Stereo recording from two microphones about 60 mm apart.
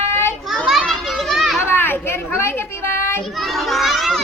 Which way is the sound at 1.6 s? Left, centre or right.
Left.